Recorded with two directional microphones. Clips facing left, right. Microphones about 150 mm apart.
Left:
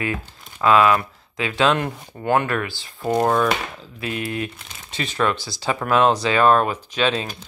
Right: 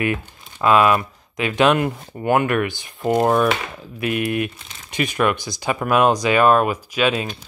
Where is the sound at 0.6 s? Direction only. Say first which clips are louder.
Right 1 dB; 20° right (ahead or behind).